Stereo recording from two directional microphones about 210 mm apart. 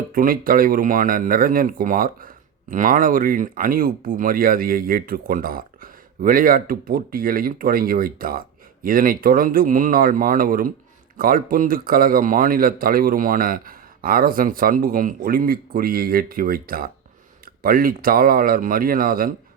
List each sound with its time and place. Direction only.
0.1 s speech: 40° right (ahead or behind)